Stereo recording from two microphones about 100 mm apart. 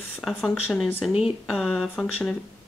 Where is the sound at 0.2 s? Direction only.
Centre (ahead or behind).